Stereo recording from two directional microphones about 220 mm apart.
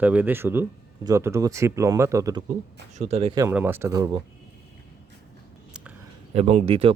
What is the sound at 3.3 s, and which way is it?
Speech, 10° right (ahead or behind).